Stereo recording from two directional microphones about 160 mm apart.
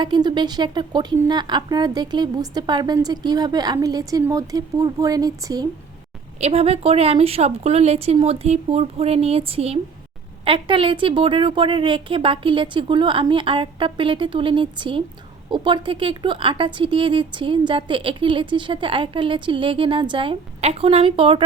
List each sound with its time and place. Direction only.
0.0 s speech: 30° right (ahead or behind)
6.4 s speech: 40° right (ahead or behind)